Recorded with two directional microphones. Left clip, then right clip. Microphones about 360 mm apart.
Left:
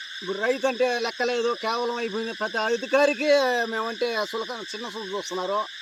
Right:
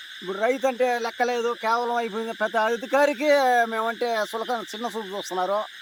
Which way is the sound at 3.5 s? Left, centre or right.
Centre.